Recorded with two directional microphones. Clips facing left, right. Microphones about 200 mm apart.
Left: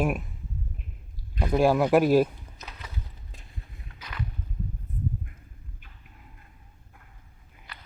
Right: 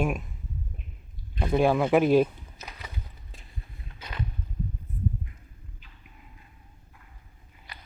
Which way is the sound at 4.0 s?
25° right (ahead or behind).